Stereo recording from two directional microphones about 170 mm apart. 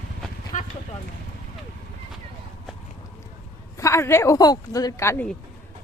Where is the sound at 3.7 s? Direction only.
15° left (ahead or behind).